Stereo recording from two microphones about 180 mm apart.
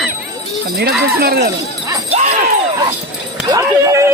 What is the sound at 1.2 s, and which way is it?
Speech, 60° right (ahead or behind).